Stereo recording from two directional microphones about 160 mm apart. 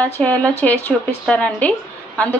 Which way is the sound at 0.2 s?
10° left (ahead or behind).